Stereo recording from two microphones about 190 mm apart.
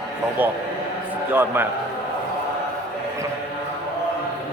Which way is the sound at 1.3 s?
10° right (ahead or behind).